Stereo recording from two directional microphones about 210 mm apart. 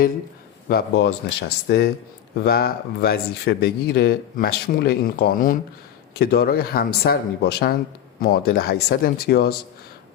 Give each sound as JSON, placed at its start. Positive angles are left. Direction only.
{"t": 0.7, "sound": "speech", "side_deg": 50}